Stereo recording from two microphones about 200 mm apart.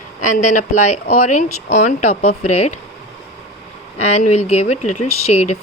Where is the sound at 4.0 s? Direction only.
35° left (ahead or behind).